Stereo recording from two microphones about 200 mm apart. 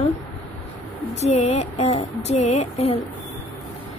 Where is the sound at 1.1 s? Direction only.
35° left (ahead or behind).